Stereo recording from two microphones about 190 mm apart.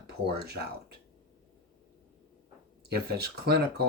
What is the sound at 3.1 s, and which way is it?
Speech, 60° right (ahead or behind).